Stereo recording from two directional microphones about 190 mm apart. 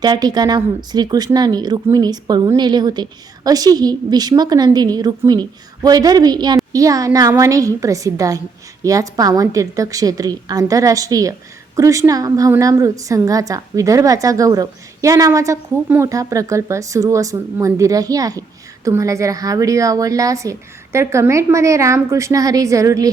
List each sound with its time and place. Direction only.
0.0 s a woman's voice: 20° right (ahead or behind)